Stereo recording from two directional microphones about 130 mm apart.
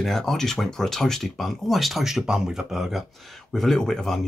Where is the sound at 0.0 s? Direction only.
5° left (ahead or behind).